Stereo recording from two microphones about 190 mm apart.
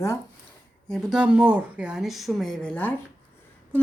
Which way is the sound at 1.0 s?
5° right (ahead or behind).